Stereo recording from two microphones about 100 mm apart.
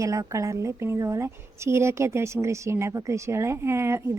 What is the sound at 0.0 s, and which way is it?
Speech, 35° right (ahead or behind).